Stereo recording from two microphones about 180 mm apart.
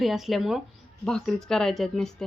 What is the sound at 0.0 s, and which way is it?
Speech, centre (ahead or behind).